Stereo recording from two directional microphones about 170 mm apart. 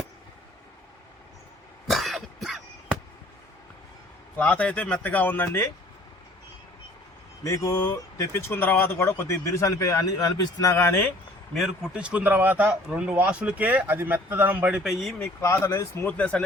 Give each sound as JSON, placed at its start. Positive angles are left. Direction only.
{"t": 1.9, "sound": "cough", "side_deg": 0}
{"t": 4.4, "sound": "speech", "side_deg": 10}
{"t": 7.4, "sound": "speech", "side_deg": 20}
{"t": 11.5, "sound": "speech", "side_deg": 0}
{"t": 15.2, "sound": "speech", "side_deg": 15}